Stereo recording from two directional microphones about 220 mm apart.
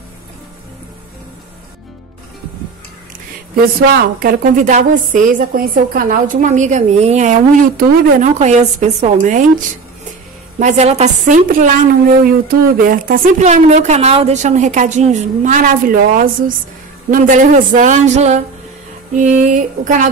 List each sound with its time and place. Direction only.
3.6 s a woman's voice: 45° right (ahead or behind)